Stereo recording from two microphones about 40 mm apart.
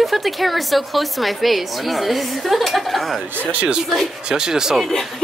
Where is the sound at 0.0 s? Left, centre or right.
Centre.